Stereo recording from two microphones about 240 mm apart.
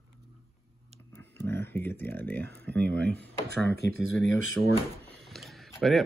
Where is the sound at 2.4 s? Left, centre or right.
Right.